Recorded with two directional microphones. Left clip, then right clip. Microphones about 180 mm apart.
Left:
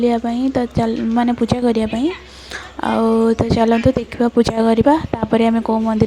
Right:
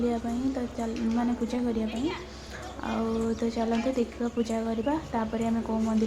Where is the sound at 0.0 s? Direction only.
50° left (ahead or behind).